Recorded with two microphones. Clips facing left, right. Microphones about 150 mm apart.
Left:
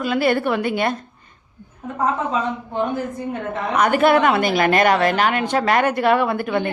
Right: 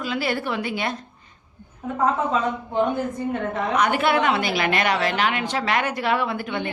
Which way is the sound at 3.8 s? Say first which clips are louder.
Left 6 dB; 45° left (ahead or behind).